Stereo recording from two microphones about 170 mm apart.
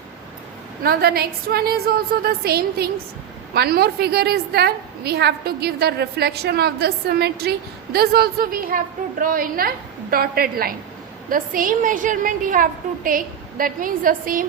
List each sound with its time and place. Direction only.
0.9 s a woman's voice: 65° right (ahead or behind)